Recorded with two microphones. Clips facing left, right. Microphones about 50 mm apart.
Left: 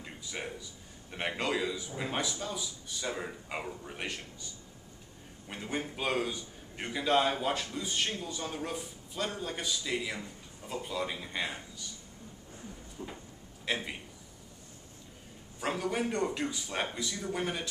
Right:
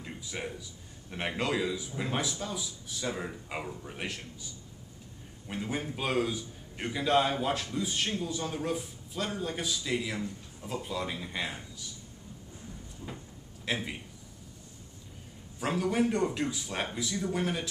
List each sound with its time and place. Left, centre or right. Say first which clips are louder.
0.0 s a sound: right 2 dB; centre
1.1 s a man's voice: right 1 dB; centre
5.5 s a man's voice: right 2 dB; centre
13.0 s a sound: left 1 dB; left
13.7 s a man's voice: right 1 dB; centre
15.6 s a man's voice: right 4 dB; centre